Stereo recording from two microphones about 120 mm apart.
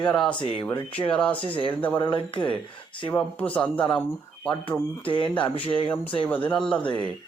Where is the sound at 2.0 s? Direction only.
45° left (ahead or behind).